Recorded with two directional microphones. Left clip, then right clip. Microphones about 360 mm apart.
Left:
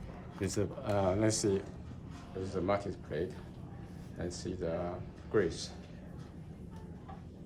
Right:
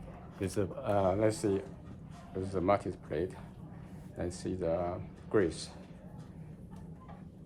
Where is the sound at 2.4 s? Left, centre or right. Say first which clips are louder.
Right 3 dB; centre.